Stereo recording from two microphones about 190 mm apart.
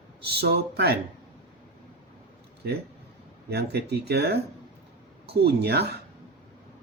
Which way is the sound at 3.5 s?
60° right (ahead or behind).